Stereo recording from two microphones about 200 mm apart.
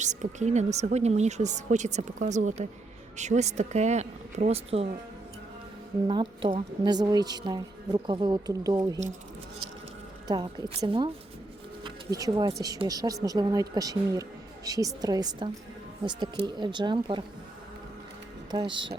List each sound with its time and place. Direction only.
0.0 s speech: 35° right (ahead or behind)
6.1 s a woman's voice: 25° right (ahead or behind)
10.2 s a woman's voice: 20° right (ahead or behind)
18.5 s a woman's voice: 25° right (ahead or behind)